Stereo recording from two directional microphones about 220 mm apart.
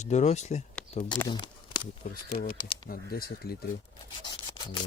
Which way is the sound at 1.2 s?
20° left (ahead or behind).